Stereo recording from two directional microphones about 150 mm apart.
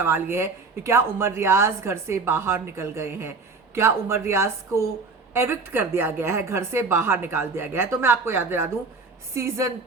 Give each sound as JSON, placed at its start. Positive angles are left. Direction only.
{"t": 0.0, "sound": "a woman's voice", "side_deg": -15}